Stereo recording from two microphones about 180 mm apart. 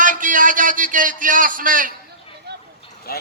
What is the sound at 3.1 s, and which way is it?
Speech, 60° left (ahead or behind).